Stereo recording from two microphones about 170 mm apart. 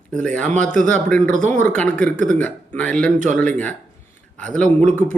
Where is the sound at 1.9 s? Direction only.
5° left (ahead or behind).